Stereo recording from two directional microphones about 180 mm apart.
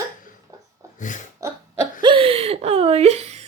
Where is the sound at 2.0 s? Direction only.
30° right (ahead or behind).